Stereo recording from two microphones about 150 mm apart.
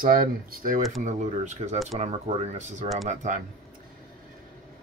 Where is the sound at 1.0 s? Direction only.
50° right (ahead or behind).